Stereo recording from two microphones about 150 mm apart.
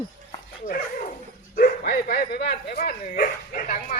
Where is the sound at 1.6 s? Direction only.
80° left.